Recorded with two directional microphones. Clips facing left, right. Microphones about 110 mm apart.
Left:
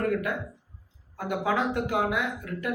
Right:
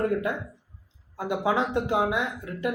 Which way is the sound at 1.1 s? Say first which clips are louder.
Right 2 dB; 25° right (ahead or behind).